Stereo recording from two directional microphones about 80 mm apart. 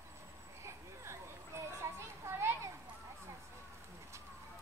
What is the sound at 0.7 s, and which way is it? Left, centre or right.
Children playing, right.